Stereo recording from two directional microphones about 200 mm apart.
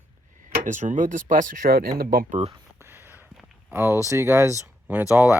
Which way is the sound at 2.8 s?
10° right (ahead or behind).